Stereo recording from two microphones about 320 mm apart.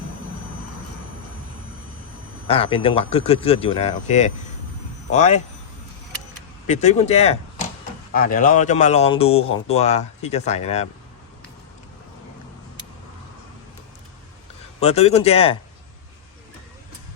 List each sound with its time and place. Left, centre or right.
2.5 s speech: centre
6.7 s speech: left
14.8 s speech: centre